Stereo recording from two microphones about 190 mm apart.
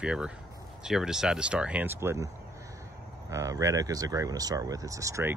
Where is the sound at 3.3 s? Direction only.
15° right (ahead or behind).